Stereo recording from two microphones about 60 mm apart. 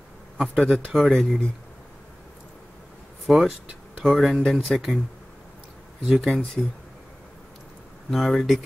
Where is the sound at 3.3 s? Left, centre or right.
Centre.